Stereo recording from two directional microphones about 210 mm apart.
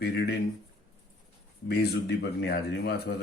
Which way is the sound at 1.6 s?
50° left (ahead or behind).